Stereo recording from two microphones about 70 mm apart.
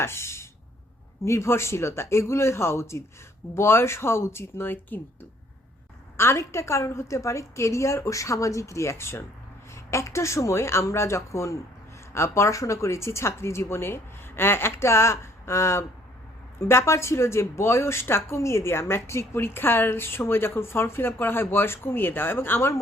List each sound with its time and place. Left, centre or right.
0.0 s a sound: left
1.2 s speech: left
6.1 s a woman's voice: left